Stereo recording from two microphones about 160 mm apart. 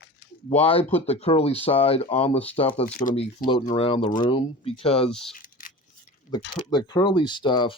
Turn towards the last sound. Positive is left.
turn(degrees=30)  # may be behind; listen again after turning